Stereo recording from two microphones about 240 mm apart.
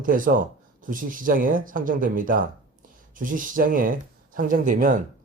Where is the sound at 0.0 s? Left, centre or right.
Right.